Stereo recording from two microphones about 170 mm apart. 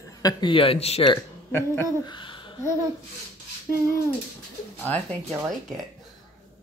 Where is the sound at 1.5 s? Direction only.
15° left (ahead or behind).